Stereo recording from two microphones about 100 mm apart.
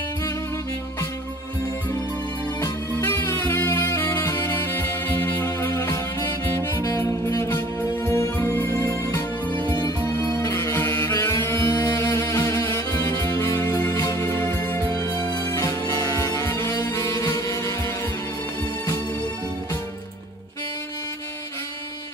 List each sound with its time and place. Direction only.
2.6 s music: 25° left (ahead or behind)
5.4 s music: 25° left (ahead or behind)
7.0 s music: 30° left (ahead or behind)
9.5 s music: 55° right (ahead or behind)
10.0 s music: 30° left (ahead or behind)
11.7 s a sound: 40° left (ahead or behind)
12.0 s music: 30° left (ahead or behind)
15.5 s music: 35° left (ahead or behind)